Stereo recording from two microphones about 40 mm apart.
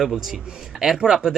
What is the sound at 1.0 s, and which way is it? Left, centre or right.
Speech, centre.